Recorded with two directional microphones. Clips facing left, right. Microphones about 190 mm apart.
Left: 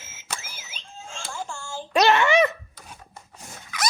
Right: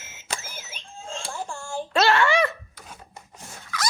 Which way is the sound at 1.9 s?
20° left (ahead or behind).